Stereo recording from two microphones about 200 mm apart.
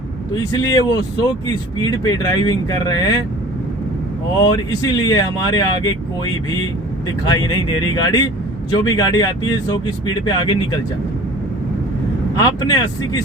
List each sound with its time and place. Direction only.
0.5 s speech: 20° left (ahead or behind)
4.4 s speech: 20° left (ahead or behind)
12.4 s speech: 20° left (ahead or behind)